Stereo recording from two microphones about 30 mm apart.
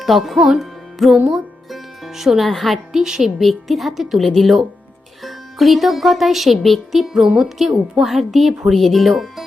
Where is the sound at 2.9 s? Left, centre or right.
Centre.